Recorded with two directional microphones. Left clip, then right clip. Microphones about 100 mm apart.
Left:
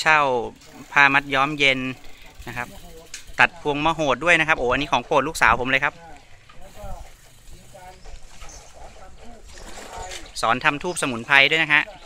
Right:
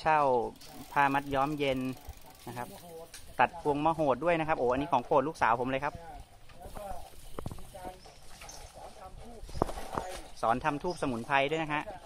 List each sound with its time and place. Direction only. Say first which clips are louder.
0.0 s speech: left 8 dB; centre (ahead or behind)
0.9 s speech: left 11 dB; 15° left (ahead or behind)
2.4 s speech: left 10 dB; 25° left (ahead or behind)
3.3 s speech: left 9 dB; 5° left (ahead or behind)
10.4 s speech: left 9 dB; 15° left (ahead or behind)